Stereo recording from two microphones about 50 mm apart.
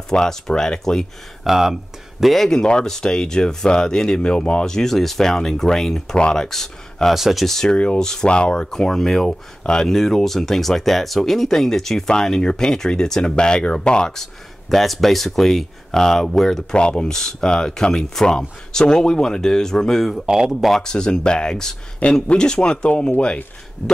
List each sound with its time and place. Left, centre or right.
0.1 s speech: centre
1.4 s speech: centre
2.3 s speech: centre
7.2 s speech: centre
7.4 s speech: centre
7.7 s speech: left; by 16.6 s centre
16.7 s speech: centre
20.2 s speech: centre
20.8 s speech: centre